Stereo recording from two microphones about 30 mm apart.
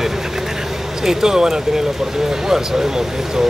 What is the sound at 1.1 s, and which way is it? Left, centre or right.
Speech, centre.